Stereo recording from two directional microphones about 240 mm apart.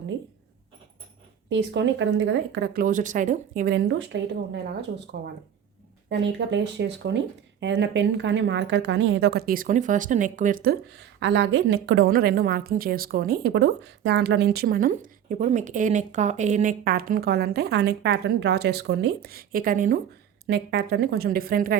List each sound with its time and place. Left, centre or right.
1.5 s a woman's voice: right